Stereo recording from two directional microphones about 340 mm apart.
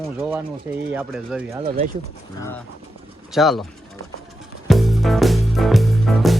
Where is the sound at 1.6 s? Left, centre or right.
Right.